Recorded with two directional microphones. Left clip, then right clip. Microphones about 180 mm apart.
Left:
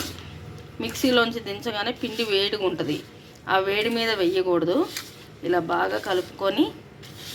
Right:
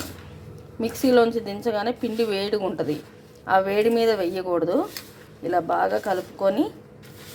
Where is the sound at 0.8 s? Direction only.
55° right (ahead or behind).